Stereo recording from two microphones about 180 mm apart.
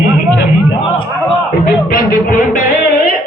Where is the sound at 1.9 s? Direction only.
50° left (ahead or behind).